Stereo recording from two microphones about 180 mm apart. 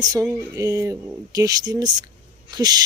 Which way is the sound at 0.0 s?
20° right (ahead or behind).